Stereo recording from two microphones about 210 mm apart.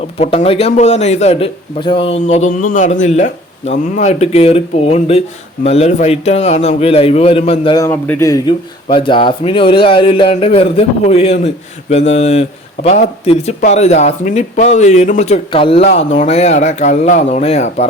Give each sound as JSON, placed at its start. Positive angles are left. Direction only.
{"t": 0.2, "sound": "a man's voice", "side_deg": 30}
{"t": 7.9, "sound": "a man's voice", "side_deg": 10}